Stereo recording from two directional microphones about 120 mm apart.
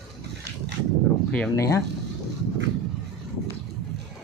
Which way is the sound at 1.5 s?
20° left (ahead or behind).